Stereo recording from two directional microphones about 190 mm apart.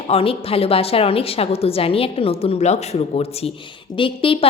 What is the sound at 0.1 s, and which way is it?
A woman's voice, 30° left (ahead or behind).